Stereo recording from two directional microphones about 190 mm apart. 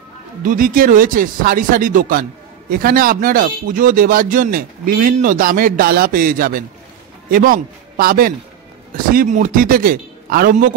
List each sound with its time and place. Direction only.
0.4 s a man's voice: 45° right (ahead or behind)